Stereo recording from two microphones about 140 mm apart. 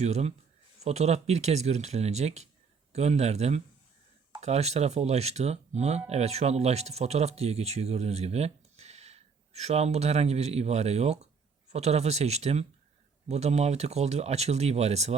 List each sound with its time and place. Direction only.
0.0 s speech: 50° right (ahead or behind)